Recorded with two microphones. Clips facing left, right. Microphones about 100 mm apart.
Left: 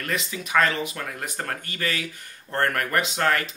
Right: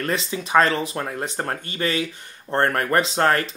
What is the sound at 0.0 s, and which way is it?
Speech, 30° right (ahead or behind).